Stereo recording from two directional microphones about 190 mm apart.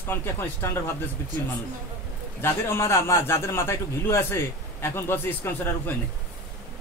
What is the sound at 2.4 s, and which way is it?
A man's voice, 10° left (ahead or behind).